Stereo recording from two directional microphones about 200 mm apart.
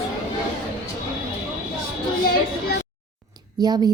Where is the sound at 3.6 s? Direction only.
20° right (ahead or behind).